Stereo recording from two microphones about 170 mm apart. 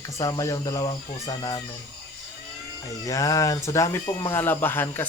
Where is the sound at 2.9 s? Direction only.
20° left (ahead or behind).